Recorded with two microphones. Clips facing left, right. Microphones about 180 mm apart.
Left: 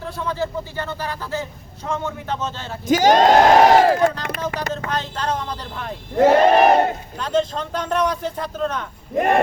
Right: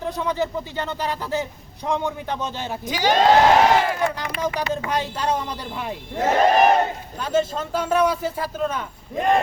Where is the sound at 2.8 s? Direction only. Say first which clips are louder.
Left 4 dB; 45° left (ahead or behind).